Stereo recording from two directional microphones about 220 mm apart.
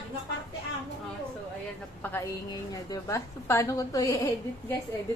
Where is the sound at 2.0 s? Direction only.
10° left (ahead or behind).